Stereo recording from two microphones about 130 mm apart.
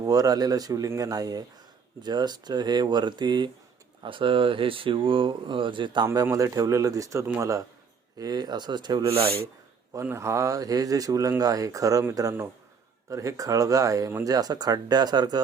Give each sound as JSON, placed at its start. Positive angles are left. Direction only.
{"t": 0.0, "sound": "speech", "side_deg": -30}
{"t": 6.1, "sound": "speech", "side_deg": -20}
{"t": 9.0, "sound": "rub", "side_deg": -50}
{"t": 9.9, "sound": "speech", "side_deg": -20}